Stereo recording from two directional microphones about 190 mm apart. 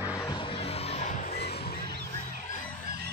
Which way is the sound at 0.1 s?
20° left (ahead or behind).